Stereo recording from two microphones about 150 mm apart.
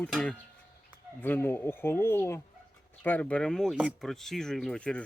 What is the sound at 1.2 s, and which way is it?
Speech, 15° left (ahead or behind).